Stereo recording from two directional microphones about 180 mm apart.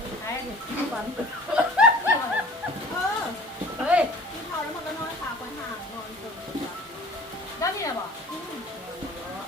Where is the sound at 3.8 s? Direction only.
5° right (ahead or behind).